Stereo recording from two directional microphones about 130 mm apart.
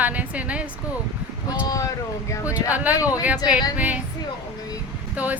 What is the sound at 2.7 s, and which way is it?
A woman's voice, 10° right (ahead or behind).